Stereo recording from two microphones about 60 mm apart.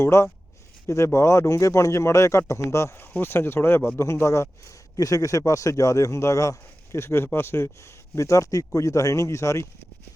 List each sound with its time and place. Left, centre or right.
0.0 s speech: left
3.0 s speech: left
4.9 s speech: left
6.9 s speech: left